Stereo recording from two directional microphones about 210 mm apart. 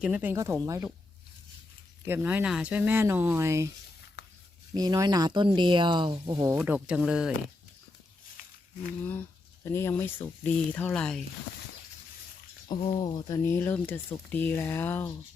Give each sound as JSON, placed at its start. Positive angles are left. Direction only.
{"t": 0.0, "sound": "speech", "side_deg": -5}
{"t": 2.0, "sound": "speech", "side_deg": -10}
{"t": 4.7, "sound": "speech", "side_deg": -20}
{"t": 8.4, "sound": "a sound", "side_deg": 40}
{"t": 9.6, "sound": "speech", "side_deg": 10}
{"t": 12.6, "sound": "speech", "side_deg": 20}